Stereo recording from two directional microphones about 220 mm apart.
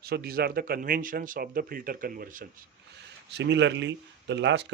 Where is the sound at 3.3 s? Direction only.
50° right (ahead or behind).